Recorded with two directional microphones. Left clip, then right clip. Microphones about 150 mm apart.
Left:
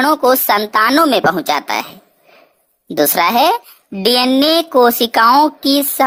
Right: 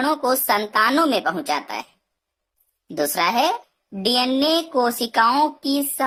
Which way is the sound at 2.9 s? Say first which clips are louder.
Left 7 dB; 35° left (ahead or behind).